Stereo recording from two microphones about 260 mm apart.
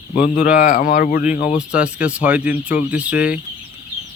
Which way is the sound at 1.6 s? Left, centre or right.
Centre.